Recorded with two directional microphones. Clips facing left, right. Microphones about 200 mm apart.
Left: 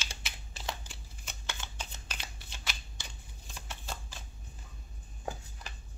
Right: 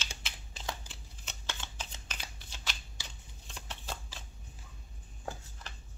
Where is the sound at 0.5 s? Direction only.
10° left (ahead or behind).